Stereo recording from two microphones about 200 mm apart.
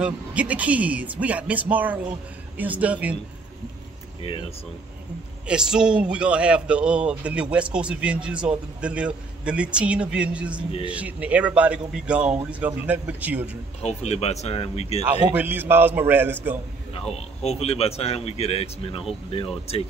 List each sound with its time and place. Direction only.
0.0 s speech: 5° right (ahead or behind)
4.2 s speech: 30° left (ahead or behind)
5.5 s a man's voice: 5° right (ahead or behind)
13.8 s speech: 30° left (ahead or behind)
15.3 s speech: 10° right (ahead or behind)
17.1 s speech: 30° left (ahead or behind)